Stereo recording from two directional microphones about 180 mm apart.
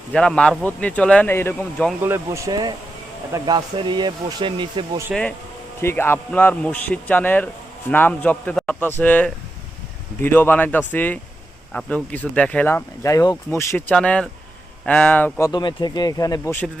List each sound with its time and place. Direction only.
0.1 s a man's voice: 5° left (ahead or behind)
2.0 s speech: 15° right (ahead or behind)
5.1 s speech: 5° right (ahead or behind)
5.8 s a man's voice: 10° left (ahead or behind)